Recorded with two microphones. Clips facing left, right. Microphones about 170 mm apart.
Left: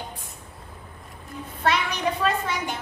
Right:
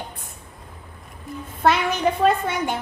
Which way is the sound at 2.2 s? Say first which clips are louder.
Right 6 dB; 55° right (ahead or behind).